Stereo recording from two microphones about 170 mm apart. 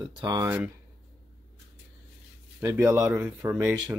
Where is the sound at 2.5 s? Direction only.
15° right (ahead or behind).